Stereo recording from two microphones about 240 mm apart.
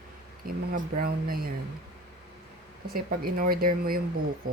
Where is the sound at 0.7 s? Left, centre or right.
Right.